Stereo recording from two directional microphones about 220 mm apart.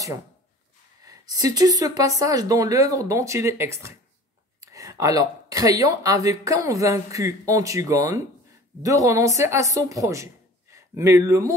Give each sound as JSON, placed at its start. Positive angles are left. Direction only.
{"t": 1.0, "sound": "speech", "side_deg": -15}